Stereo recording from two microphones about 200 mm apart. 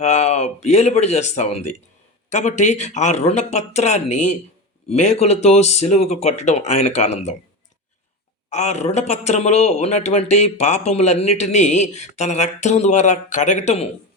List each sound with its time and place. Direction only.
0.0 s speech: 35° left (ahead or behind)
8.4 s speech: 35° left (ahead or behind)